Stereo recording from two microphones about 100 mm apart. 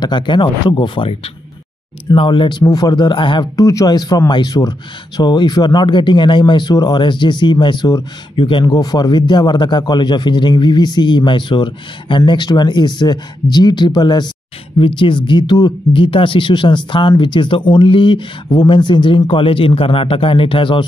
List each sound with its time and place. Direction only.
0.0 s speech: 50° left (ahead or behind)
2.6 s speech: 40° left (ahead or behind)
3.5 s speech: 35° left (ahead or behind)
15.9 s speech: 60° left (ahead or behind)